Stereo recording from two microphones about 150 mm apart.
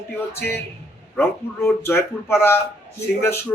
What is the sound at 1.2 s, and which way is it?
Speech, 15° left (ahead or behind).